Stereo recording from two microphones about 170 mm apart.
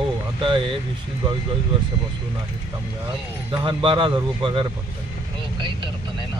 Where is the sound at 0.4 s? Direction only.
30° right (ahead or behind).